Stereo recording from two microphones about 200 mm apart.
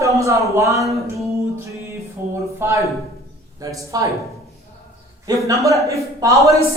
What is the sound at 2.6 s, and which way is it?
A man's voice, 15° right (ahead or behind).